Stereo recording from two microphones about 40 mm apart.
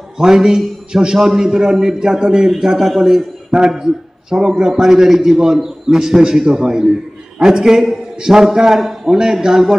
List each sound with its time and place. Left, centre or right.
0.2 s a man's voice: centre
3.5 s a man's voice: right